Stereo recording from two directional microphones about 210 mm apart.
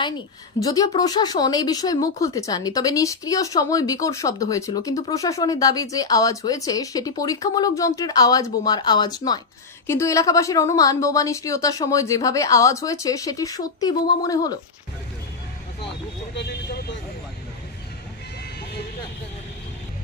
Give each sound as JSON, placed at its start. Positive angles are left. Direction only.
{"t": 0.6, "sound": "a woman's voice", "side_deg": 15}